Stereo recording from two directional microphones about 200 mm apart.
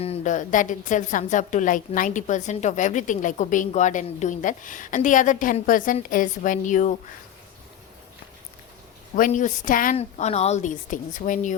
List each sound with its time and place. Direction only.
0.0 s a woman's voice: 35° left (ahead or behind)
9.1 s a woman's voice: 40° left (ahead or behind)